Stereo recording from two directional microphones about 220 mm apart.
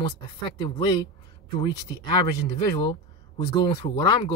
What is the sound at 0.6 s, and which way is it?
Speech, 20° left (ahead or behind).